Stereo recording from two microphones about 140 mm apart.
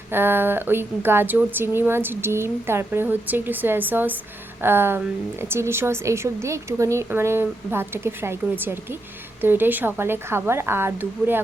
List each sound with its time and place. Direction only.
0.1 s a woman's voice: 15° right (ahead or behind)